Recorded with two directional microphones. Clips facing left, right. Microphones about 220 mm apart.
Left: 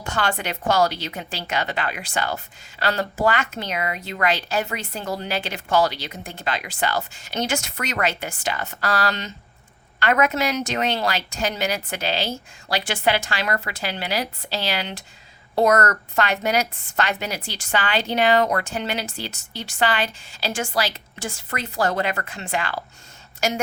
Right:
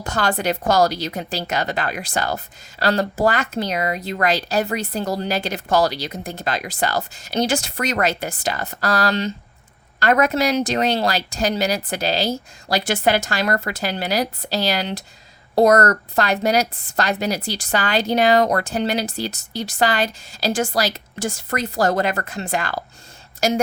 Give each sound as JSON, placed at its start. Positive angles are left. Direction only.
{"t": 0.0, "sound": "a woman's voice", "side_deg": -40}